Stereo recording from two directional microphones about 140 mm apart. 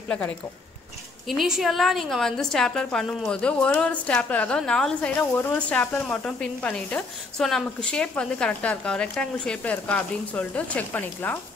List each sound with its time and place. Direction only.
1.3 s a woman's voice: centre (ahead or behind)